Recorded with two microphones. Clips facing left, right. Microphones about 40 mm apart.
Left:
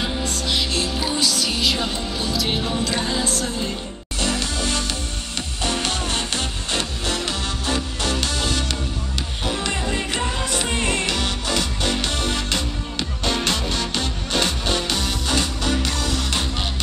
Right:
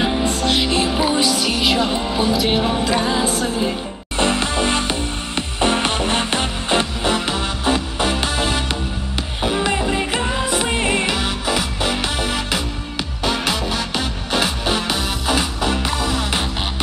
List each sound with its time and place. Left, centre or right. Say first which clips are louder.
0.0 s music: right 6 dB; right
4.2 s music: right 6 dB; right